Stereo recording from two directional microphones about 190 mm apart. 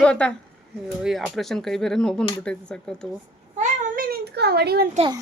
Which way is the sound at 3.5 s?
50° right (ahead or behind).